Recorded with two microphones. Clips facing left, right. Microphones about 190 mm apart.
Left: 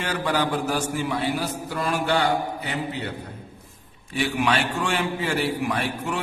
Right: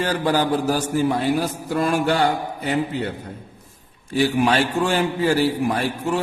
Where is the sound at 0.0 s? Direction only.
35° right (ahead or behind).